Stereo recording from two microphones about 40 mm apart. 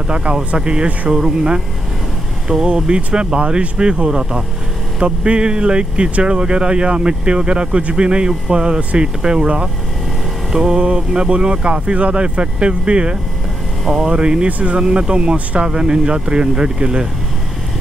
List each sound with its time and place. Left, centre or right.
0.1 s speech: right
10.5 s mantra: centre
10.8 s speech: right